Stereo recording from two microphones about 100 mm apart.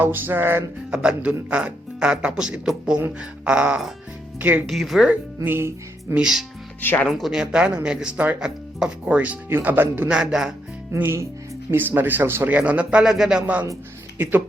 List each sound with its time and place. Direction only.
0.0 s speech: 20° right (ahead or behind)
0.9 s speech: 10° right (ahead or behind)
4.7 s speech: centre (ahead or behind)
5.4 s music: 25° right (ahead or behind)
6.1 s speech: 5° right (ahead or behind)
6.8 s speech: 20° left (ahead or behind)
7.1 s speech: 5° right (ahead or behind); by 10.1 s 20° right (ahead or behind)
10.1 s speech: 5° right (ahead or behind)
10.9 s speech: 25° right (ahead or behind)